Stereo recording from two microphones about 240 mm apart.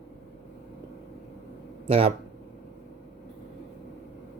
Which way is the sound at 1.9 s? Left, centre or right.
Right.